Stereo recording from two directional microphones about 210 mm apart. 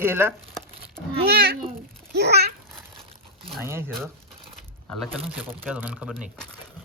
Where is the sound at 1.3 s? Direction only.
50° right (ahead or behind).